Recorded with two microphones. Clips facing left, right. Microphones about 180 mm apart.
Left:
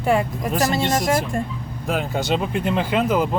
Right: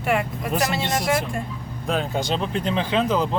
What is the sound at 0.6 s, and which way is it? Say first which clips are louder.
Speech: left 4 dB; 45° left (ahead or behind).